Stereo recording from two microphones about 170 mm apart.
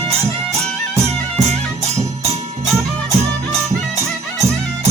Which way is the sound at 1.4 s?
40° right (ahead or behind).